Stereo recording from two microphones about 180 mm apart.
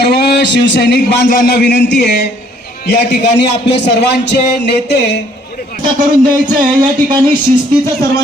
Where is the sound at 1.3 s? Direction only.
55° left (ahead or behind).